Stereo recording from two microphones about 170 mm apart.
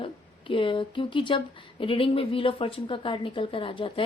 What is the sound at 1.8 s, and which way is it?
Speech, 30° left (ahead or behind).